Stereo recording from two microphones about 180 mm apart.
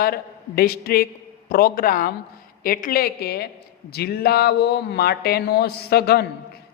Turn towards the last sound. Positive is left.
turn(degrees=60)  # may be behind; listen again after turning